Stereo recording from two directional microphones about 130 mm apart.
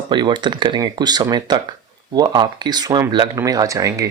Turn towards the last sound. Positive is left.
turn(degrees=-25)  # may be behind; listen again after turning